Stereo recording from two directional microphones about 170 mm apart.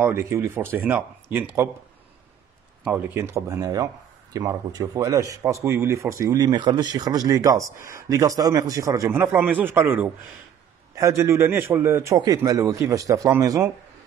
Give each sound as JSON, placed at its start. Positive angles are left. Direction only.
{"t": 0.0, "sound": "a man's voice", "side_deg": -15}
{"t": 2.8, "sound": "a man's voice", "side_deg": -10}